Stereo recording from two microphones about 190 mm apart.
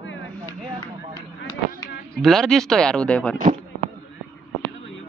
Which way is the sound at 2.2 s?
Centre (ahead or behind).